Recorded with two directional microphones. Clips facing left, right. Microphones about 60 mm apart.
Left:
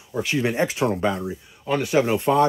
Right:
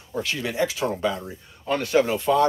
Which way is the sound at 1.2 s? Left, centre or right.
Centre.